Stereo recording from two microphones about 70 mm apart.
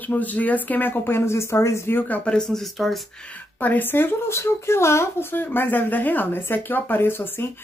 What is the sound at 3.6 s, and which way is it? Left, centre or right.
Speech, left.